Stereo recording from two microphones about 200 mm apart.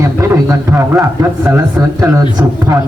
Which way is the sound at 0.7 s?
15° right (ahead or behind).